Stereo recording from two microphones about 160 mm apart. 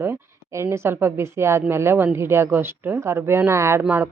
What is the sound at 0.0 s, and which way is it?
Speech, 15° right (ahead or behind).